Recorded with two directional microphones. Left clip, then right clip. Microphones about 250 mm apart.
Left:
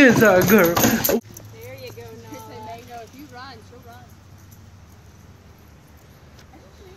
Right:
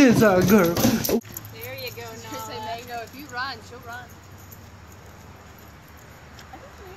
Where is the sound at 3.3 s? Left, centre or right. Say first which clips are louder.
Right 11 dB; right.